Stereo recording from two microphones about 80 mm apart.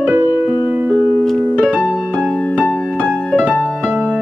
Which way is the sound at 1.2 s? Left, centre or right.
Centre.